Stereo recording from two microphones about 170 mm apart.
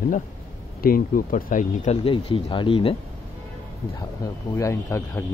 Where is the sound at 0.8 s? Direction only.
55° left (ahead or behind).